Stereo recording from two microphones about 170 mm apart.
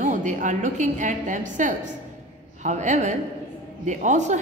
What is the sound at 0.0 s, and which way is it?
A woman's voice, 45° right (ahead or behind).